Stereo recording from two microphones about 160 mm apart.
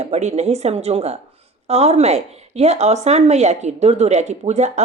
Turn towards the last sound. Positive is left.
turn(degrees=-45)  # may be behind; listen again after turning